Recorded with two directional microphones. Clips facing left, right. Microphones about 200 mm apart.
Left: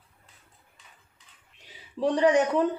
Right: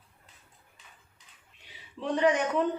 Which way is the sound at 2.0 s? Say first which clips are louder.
Left 4 dB; 40° left (ahead or behind).